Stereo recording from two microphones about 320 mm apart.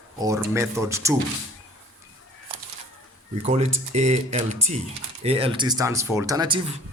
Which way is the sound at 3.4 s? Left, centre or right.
Right.